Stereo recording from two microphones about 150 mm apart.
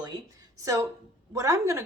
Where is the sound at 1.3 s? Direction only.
20° right (ahead or behind).